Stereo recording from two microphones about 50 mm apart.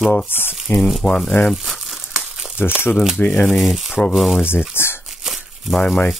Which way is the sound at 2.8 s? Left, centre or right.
Left.